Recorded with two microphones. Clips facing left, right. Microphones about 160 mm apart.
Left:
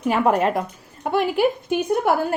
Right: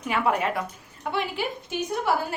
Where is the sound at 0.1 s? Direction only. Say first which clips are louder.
Left 6 dB; 40° left (ahead or behind).